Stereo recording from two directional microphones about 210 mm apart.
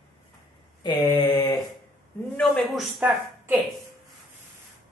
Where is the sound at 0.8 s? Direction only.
20° left (ahead or behind).